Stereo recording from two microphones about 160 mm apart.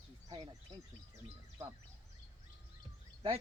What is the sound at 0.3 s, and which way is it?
Speech, 25° right (ahead or behind).